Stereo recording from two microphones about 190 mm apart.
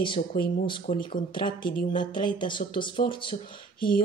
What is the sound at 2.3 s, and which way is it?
Speech, 25° left (ahead or behind).